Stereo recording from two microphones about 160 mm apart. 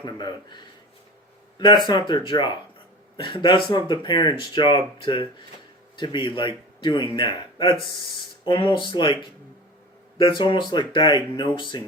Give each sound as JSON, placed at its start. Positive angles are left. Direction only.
{"t": 0.0, "sound": "speech", "side_deg": 30}
{"t": 10.2, "sound": "speech", "side_deg": 30}